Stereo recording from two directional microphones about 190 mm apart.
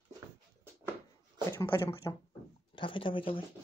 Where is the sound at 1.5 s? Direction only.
15° left (ahead or behind).